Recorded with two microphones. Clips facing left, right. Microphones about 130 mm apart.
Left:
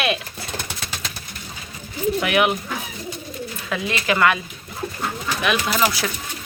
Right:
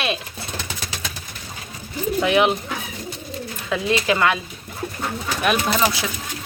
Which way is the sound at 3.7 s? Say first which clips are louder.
Right 3 dB; 25° right (ahead or behind).